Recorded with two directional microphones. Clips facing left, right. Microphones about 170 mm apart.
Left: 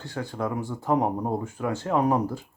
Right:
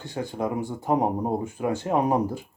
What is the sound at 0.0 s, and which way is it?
Speech, 15° right (ahead or behind).